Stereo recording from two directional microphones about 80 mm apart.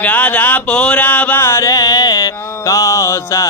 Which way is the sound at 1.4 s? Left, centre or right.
Left.